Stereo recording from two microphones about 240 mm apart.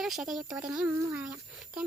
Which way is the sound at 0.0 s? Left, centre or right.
Centre.